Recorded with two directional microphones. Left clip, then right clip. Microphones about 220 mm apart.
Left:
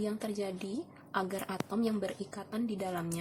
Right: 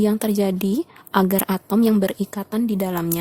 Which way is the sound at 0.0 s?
50° right (ahead or behind).